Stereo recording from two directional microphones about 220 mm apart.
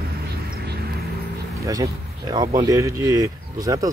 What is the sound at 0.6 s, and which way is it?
Vehicle, 45° right (ahead or behind).